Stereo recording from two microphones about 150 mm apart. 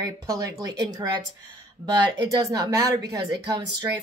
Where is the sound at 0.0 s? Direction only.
20° right (ahead or behind).